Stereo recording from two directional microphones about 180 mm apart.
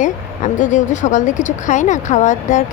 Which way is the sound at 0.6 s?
45° left (ahead or behind).